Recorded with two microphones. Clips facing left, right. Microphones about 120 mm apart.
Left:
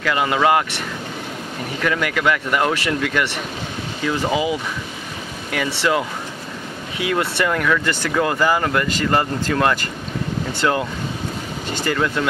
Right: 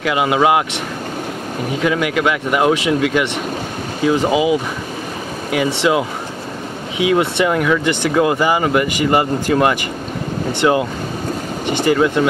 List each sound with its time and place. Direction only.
0.0 s speech: 15° right (ahead or behind)
1.8 s speech: 15° right (ahead or behind)